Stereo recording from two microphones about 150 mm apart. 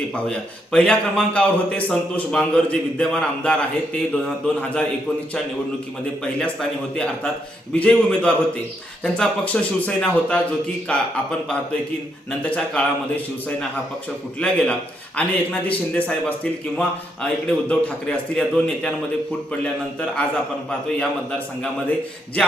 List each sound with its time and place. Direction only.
0.1 s a man's voice: 5° left (ahead or behind)
6.4 s a man's voice: 5° left (ahead or behind)
14.3 s a man's voice: 10° left (ahead or behind)